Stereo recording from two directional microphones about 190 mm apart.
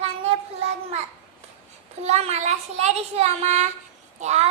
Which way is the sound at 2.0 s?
35° right (ahead or behind).